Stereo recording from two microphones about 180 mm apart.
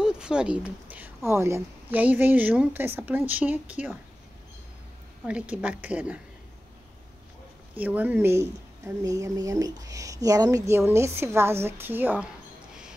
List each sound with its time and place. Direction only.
0.0 s a woman's voice: 5° right (ahead or behind)
5.2 s a woman's voice: 5° right (ahead or behind)
7.8 s a woman's voice: 10° right (ahead or behind)